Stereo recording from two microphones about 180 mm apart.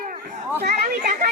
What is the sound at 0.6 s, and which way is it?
Chatter, 50° right (ahead or behind).